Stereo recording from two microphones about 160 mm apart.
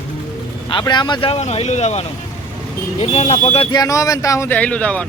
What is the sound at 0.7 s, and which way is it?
Speech, 30° left (ahead or behind).